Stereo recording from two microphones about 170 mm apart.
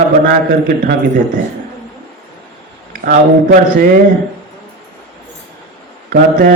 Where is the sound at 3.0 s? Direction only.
55° right (ahead or behind).